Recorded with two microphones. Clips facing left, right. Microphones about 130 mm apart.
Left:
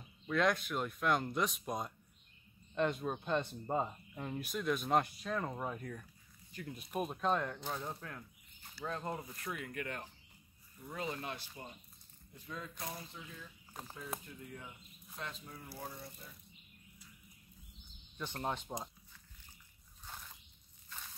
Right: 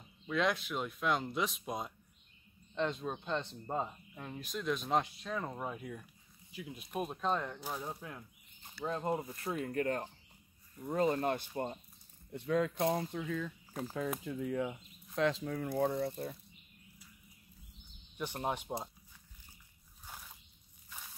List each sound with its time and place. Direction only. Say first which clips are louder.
0.3 s speech: even; centre (ahead or behind); by 11.8 s 55° right (ahead or behind)
12.3 s speech: right 15 dB; 75° right (ahead or behind)
15.8 s speech: right 16 dB; 65° right (ahead or behind)
18.1 s speech: right 3 dB; 15° right (ahead or behind)
20.0 s biting: even; 10° right (ahead or behind)